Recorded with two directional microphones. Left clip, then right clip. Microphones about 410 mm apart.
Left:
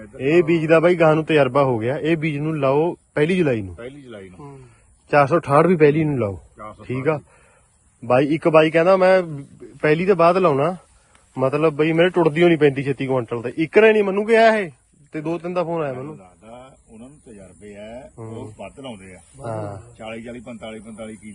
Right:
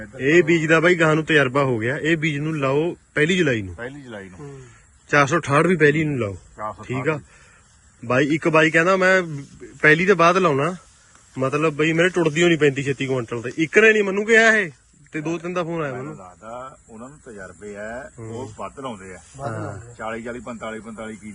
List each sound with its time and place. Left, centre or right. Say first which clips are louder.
0.2 s a man's voice: right 1 dB; centre
3.9 s speech: right 2 dB; centre
5.0 s a man's voice: left 2 dB; centre
16.4 s speech: right 7 dB; centre
19.6 s a man's voice: right 2 dB; centre
20.1 s a man's voice: right 3 dB; right